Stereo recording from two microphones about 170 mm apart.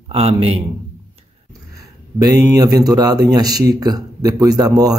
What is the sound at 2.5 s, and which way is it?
Speech, 20° right (ahead or behind).